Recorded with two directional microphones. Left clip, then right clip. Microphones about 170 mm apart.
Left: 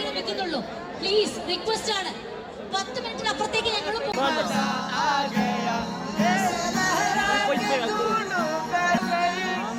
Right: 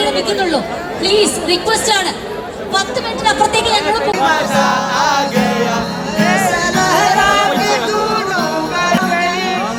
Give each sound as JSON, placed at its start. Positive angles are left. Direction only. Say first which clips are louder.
{"t": 0.3, "sound": "a woman's voice", "louder": "right 13 dB", "side_deg": 45}
{"t": 3.2, "sound": "a woman's voice", "louder": "right 13 dB", "side_deg": 45}
{"t": 6.5, "sound": "music", "louder": "right 11 dB", "side_deg": -80}